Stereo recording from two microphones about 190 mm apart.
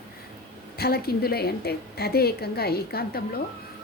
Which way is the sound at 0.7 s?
55° left (ahead or behind).